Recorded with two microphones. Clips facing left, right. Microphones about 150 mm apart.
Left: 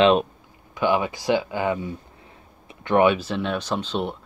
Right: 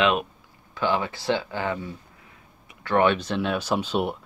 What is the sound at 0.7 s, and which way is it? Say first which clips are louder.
Speech: left 3 dB; 15° left (ahead or behind).